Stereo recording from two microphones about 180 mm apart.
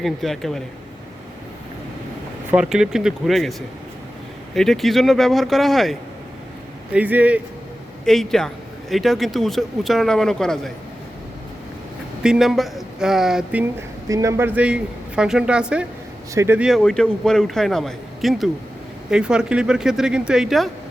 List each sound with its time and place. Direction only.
0.0 s a man's voice: centre (ahead or behind)
2.5 s a man's voice: 5° right (ahead or behind)
4.5 s a man's voice: centre (ahead or behind)
8.0 s a man's voice: centre (ahead or behind)
12.2 s a man's voice: 5° right (ahead or behind)
14.1 s a man's voice: 15° right (ahead or behind)
16.3 s a man's voice: 15° right (ahead or behind)
16.6 s a man's voice: centre (ahead or behind)